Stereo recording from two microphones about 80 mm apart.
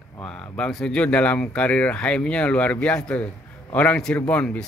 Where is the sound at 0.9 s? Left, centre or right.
Centre.